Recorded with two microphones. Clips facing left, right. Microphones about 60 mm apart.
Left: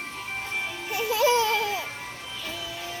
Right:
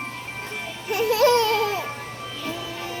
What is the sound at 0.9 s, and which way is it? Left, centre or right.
Music, right.